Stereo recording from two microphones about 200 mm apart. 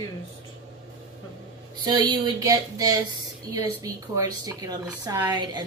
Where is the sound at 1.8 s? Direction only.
20° right (ahead or behind).